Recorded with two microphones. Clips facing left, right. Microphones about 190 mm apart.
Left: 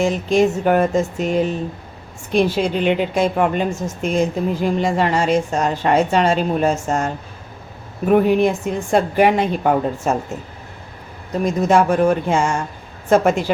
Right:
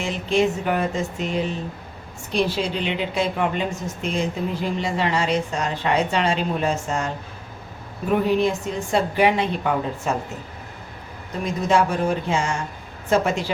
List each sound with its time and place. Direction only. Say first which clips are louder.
0.0 s a woman's voice: left 5 dB; 45° left (ahead or behind)
11.4 s a woman's voice: left 5 dB; 50° left (ahead or behind)